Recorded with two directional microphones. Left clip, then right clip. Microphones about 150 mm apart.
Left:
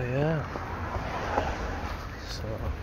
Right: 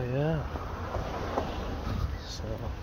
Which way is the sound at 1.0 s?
90° right.